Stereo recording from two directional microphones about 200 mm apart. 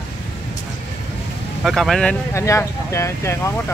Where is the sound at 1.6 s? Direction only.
Centre (ahead or behind).